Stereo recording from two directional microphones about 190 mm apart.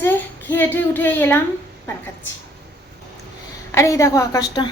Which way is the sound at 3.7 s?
15° left (ahead or behind).